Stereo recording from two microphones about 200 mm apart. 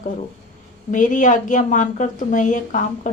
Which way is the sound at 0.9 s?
40° left (ahead or behind).